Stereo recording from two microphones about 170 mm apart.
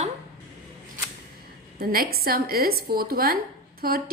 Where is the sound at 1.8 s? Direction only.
60° right (ahead or behind).